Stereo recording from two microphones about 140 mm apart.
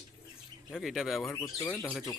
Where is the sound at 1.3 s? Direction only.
15° left (ahead or behind).